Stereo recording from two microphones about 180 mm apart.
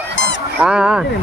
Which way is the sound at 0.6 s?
5° right (ahead or behind).